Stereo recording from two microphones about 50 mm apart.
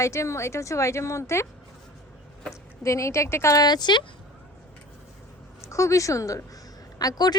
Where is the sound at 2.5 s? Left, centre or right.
Left.